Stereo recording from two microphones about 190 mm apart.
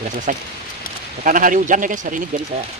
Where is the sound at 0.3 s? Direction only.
45° right (ahead or behind).